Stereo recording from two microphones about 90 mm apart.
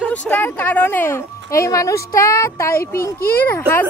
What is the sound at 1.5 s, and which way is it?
A child's voice, 35° left (ahead or behind).